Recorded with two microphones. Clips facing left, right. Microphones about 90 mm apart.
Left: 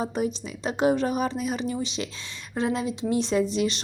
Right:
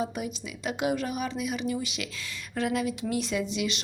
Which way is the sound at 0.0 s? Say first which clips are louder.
Left 5 dB; 35° left (ahead or behind).